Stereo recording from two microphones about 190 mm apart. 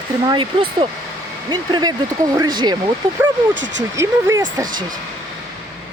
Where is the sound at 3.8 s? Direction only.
15° right (ahead or behind).